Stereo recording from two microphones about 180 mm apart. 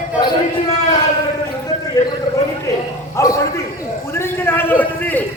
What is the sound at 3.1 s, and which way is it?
Bow-wow, 15° left (ahead or behind).